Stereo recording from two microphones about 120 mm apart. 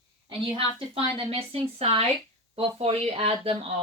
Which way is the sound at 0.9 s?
50° right (ahead or behind).